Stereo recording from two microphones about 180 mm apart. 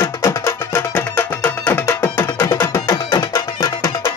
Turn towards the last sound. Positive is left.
turn(degrees=20)  # may be behind; listen again after turning